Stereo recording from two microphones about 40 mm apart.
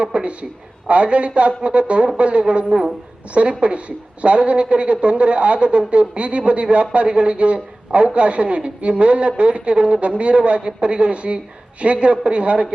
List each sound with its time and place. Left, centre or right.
0.0 s a woman's voice: right